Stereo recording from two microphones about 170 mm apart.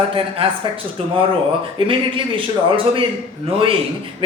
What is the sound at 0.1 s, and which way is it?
A man's voice, 30° right (ahead or behind).